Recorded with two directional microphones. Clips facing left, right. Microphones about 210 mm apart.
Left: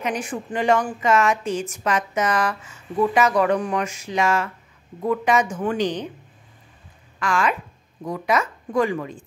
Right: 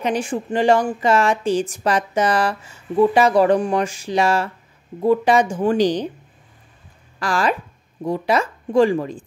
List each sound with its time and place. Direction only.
0.0 s speech: 30° right (ahead or behind)
7.2 s speech: 35° right (ahead or behind)